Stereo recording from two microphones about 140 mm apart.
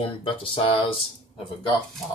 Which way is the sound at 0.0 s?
40° left (ahead or behind).